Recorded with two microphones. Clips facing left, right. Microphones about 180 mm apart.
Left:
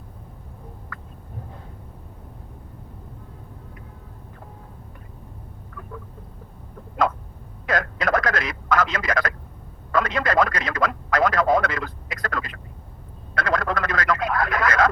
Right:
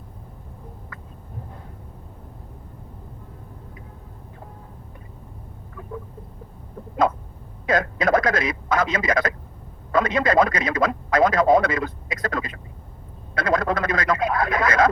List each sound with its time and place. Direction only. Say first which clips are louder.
7.7 s a man's voice: right 3 dB; 20° right (ahead or behind)